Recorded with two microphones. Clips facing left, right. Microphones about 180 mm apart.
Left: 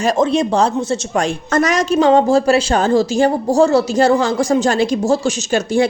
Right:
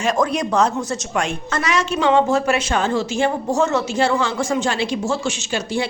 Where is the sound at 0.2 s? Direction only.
25° left (ahead or behind).